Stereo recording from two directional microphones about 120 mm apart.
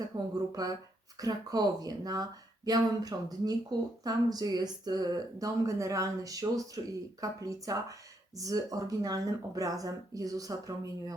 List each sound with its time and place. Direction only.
0.5 s speech: 30° right (ahead or behind)